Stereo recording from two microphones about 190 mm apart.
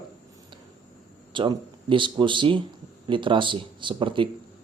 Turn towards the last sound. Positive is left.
turn(degrees=-25)  # may be behind; listen again after turning